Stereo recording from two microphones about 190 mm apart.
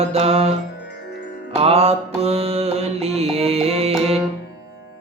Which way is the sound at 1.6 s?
30° right (ahead or behind).